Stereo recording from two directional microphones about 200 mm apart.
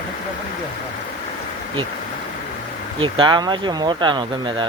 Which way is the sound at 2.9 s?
25° right (ahead or behind).